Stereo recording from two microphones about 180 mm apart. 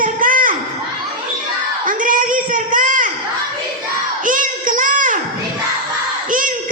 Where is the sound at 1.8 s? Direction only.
50° right (ahead or behind).